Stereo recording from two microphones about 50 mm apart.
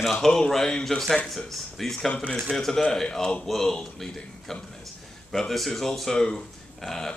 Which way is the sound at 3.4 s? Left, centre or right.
Centre.